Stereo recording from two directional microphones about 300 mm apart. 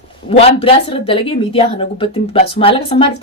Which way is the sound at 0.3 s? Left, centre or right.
Centre.